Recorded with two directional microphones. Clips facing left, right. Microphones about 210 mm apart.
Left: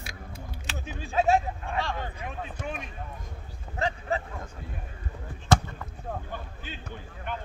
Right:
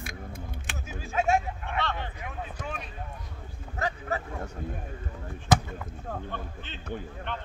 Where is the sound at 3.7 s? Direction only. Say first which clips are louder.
Left 2 dB; 25° left (ahead or behind).